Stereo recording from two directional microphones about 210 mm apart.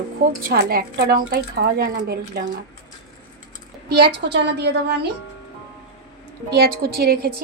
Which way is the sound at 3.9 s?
55° right (ahead or behind).